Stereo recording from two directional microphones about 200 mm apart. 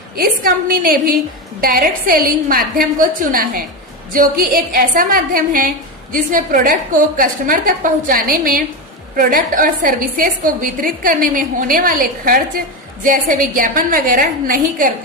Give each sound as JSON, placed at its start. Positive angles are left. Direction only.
{"t": 0.2, "sound": "a woman's voice", "side_deg": -45}